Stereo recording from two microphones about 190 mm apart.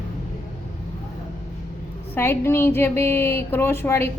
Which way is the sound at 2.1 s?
10° left (ahead or behind).